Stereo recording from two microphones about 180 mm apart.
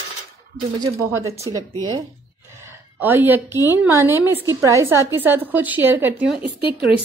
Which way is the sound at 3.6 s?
15° right (ahead or behind).